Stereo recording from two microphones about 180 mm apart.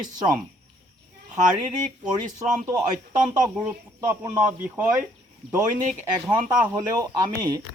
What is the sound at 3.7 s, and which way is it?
Speech, 15° right (ahead or behind).